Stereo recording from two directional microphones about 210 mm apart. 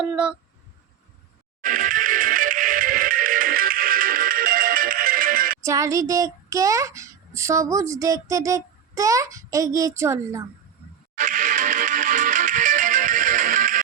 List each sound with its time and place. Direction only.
0.0 s speech: 5° right (ahead or behind)
1.6 s music: 40° right (ahead or behind)
5.6 s a child's voice: 15° right (ahead or behind)
11.1 s music: 35° right (ahead or behind)